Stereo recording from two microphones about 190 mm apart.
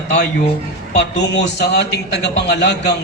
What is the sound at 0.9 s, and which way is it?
A man's voice, 65° left (ahead or behind).